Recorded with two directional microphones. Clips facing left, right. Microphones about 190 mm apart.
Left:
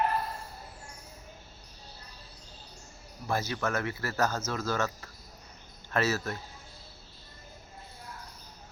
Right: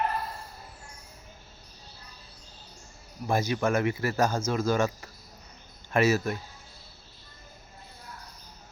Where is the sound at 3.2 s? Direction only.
15° right (ahead or behind).